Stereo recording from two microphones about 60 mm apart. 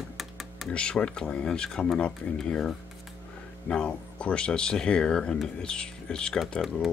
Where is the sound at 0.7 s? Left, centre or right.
Centre.